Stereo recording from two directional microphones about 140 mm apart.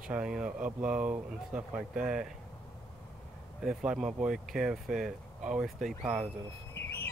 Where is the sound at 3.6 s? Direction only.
5° right (ahead or behind).